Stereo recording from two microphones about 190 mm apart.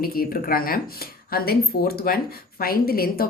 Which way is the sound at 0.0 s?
50° left (ahead or behind).